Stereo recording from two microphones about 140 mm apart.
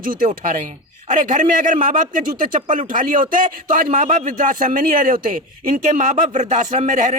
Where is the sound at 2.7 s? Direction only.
70° right (ahead or behind).